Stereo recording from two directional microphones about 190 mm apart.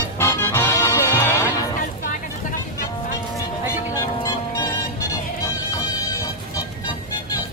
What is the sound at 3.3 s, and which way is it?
Music, 15° left (ahead or behind).